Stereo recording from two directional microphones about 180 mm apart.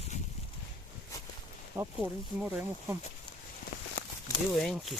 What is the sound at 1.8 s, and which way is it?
Speech, 10° right (ahead or behind).